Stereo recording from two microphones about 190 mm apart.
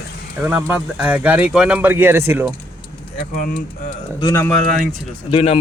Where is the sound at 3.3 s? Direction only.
45° left (ahead or behind).